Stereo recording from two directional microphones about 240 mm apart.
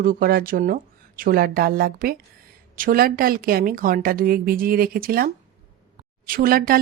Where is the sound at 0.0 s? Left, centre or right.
Right.